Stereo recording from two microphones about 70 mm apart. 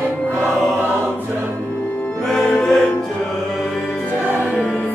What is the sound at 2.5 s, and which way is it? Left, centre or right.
Music, centre.